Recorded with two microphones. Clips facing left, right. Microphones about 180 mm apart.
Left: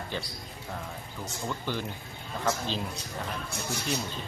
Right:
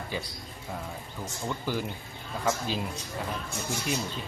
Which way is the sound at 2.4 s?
10° right (ahead or behind).